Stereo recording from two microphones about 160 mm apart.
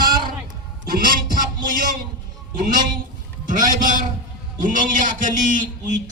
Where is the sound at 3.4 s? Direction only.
55° right (ahead or behind).